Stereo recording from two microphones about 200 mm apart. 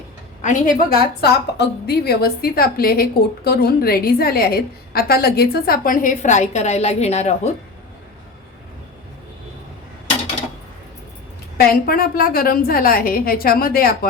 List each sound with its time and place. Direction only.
0.4 s a woman's voice: 40° left (ahead or behind)
11.5 s a woman's voice: 50° left (ahead or behind)